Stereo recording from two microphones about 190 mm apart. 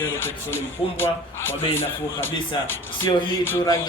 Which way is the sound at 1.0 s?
10° left (ahead or behind).